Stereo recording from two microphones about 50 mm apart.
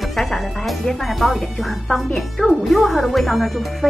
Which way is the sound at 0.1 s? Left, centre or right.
Centre.